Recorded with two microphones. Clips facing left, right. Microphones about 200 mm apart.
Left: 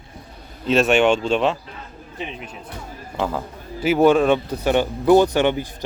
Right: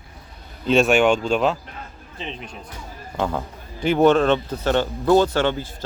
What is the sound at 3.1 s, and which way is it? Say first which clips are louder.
Speech: even; 5° left (ahead or behind).